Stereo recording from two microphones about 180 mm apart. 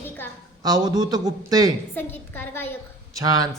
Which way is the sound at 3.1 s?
20° right (ahead or behind).